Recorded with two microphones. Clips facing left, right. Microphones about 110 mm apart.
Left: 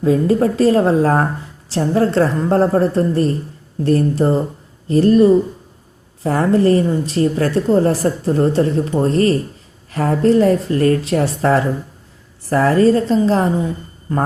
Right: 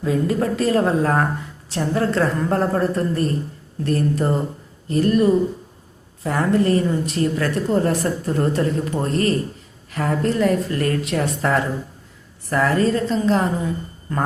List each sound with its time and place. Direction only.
0.0 s a woman's voice: 30° left (ahead or behind)